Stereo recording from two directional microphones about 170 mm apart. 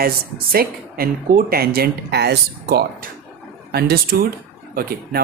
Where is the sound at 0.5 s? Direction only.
60° right (ahead or behind).